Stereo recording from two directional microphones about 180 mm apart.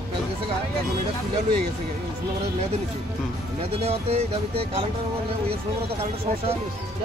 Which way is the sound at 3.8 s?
35° right (ahead or behind).